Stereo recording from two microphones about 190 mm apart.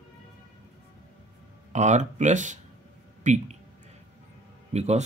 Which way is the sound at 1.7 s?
40° right (ahead or behind).